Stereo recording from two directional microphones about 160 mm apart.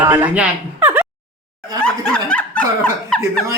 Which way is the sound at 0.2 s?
10° right (ahead or behind).